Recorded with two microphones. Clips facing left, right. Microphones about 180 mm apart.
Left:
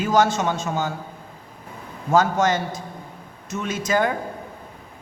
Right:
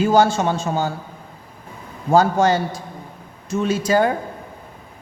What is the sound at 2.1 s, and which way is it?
A man's voice, 30° right (ahead or behind).